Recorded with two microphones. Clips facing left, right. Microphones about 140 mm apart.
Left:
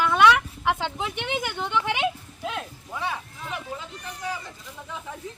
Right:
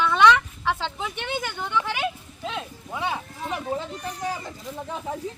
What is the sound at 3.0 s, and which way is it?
Speech, 30° right (ahead or behind).